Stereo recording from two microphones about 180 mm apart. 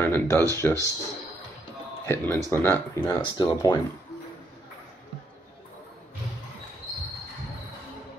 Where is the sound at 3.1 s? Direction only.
25° left (ahead or behind).